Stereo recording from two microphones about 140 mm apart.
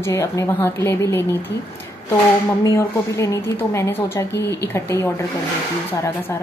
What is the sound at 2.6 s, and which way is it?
A woman's voice, 20° left (ahead or behind).